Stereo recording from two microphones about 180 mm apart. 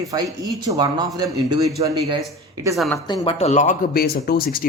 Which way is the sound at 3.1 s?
30° left (ahead or behind).